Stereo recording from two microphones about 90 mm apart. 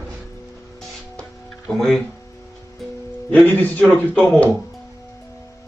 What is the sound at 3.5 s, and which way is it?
A man's voice, 20° left (ahead or behind).